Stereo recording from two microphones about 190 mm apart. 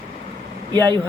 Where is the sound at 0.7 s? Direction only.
20° right (ahead or behind).